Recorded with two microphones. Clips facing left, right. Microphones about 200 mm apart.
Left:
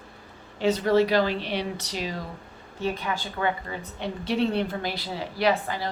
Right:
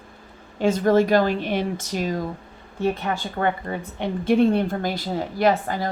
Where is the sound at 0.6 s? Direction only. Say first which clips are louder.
Right 3 dB; 50° right (ahead or behind).